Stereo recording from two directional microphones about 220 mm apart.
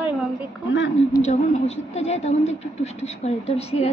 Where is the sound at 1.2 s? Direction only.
30° left (ahead or behind).